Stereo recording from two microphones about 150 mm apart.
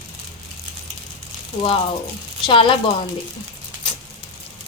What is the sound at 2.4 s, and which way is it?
Speech, 35° left (ahead or behind).